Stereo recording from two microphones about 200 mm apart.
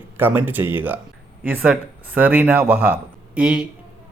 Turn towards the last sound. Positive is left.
turn(degrees=-5)  # may be behind; listen again after turning